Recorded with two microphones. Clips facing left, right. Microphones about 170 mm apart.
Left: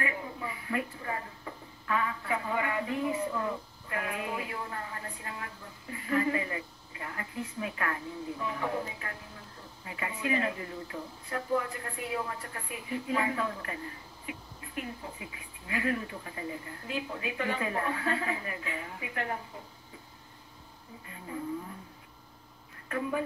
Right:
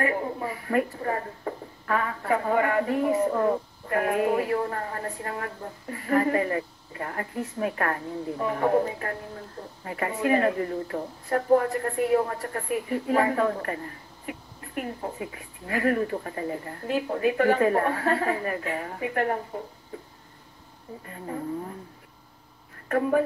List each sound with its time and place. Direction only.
0.0 s a sound: 45° right (ahead or behind)
21.0 s speech: 45° right (ahead or behind)
22.8 s speech: 50° right (ahead or behind)